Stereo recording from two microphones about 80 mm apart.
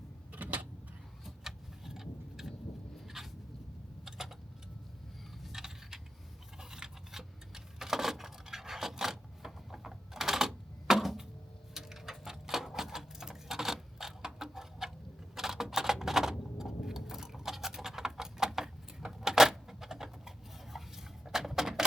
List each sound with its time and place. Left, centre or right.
0.3 s vehicle: centre
1.2 s vehicle: centre
3.0 s a sound: centre
5.4 s keys jangling: centre
6.6 s clock: centre
11.7 s a sound: centre
15.4 s typewriter: centre
16.6 s keys jangling: centre
20.7 s a sound: centre